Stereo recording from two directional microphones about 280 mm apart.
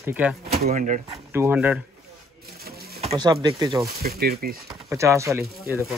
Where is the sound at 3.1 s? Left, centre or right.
Centre.